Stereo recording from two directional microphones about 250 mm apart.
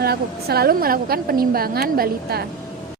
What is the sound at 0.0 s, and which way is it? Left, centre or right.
Speech, right.